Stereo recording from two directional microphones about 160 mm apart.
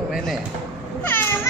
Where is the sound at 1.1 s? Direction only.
15° left (ahead or behind).